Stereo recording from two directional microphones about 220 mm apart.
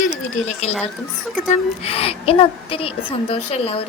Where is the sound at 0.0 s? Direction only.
30° left (ahead or behind).